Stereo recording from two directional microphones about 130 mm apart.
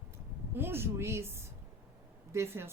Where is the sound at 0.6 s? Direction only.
20° right (ahead or behind).